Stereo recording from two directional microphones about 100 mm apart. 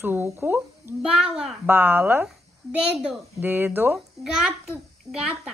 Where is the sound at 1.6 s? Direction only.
20° right (ahead or behind).